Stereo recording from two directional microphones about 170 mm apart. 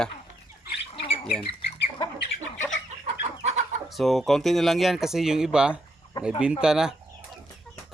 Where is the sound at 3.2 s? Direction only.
40° right (ahead or behind).